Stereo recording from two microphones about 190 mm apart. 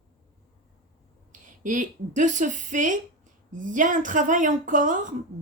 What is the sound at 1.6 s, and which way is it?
A woman's voice, 40° right (ahead or behind).